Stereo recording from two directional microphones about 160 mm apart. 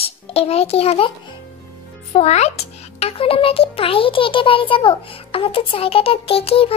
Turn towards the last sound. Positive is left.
turn(degrees=35)  # may be behind; listen again after turning